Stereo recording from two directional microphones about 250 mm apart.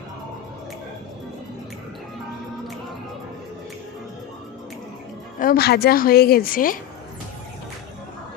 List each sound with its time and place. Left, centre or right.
5.4 s a woman's voice: left